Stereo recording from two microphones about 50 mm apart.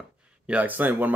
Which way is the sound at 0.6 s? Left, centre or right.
Right.